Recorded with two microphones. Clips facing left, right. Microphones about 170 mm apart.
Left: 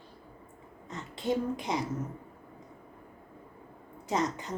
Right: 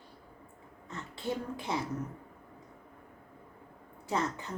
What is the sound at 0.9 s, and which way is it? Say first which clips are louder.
Speech: left 5 dB; 15° left (ahead or behind).